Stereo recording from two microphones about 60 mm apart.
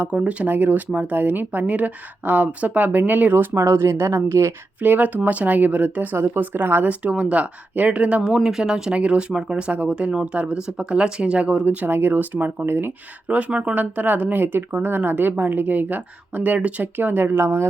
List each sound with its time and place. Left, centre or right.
0.0 s speech: right
3.5 s speech: right
4.8 s speech: right
6.8 s speech: right
8.4 s speech: centre; by 12.9 s right
13.2 s speech: right